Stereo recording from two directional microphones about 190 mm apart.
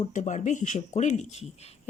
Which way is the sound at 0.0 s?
40° left (ahead or behind).